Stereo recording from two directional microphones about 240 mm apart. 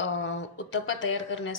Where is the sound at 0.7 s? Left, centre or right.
Left.